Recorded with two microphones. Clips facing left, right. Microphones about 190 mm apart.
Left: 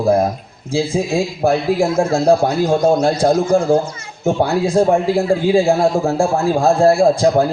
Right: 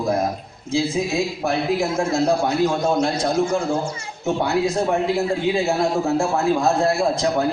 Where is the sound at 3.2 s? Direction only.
30° left (ahead or behind).